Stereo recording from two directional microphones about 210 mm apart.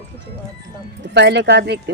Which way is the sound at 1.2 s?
55° right (ahead or behind).